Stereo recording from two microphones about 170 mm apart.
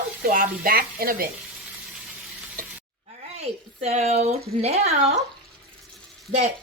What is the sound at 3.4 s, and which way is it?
Speech, 40° right (ahead or behind).